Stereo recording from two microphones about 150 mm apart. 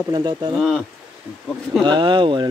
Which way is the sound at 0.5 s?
Centre (ahead or behind).